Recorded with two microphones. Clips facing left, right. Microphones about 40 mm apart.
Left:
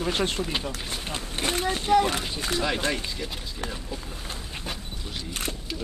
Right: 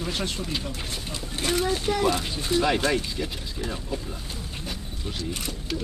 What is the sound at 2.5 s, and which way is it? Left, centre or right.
Speech, left.